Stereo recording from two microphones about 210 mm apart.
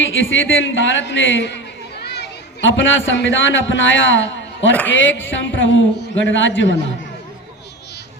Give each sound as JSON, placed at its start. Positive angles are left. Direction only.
{"t": 0.0, "sound": "a man's voice", "side_deg": 65}